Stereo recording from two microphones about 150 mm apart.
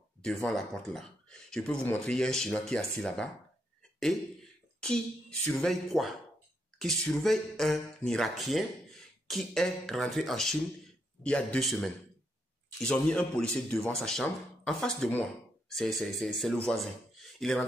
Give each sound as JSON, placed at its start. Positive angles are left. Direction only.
{"t": 0.5, "sound": "speech", "side_deg": 0}
{"t": 4.7, "sound": "speech", "side_deg": 5}
{"t": 16.8, "sound": "a sound", "side_deg": 0}